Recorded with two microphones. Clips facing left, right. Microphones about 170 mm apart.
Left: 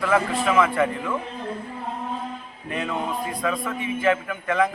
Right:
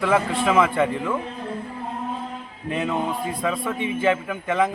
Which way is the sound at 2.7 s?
25° right (ahead or behind).